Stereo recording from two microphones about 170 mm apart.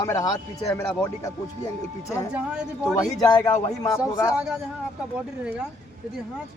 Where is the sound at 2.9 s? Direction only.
20° left (ahead or behind).